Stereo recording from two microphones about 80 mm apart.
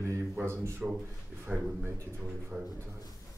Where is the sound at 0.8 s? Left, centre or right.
Centre.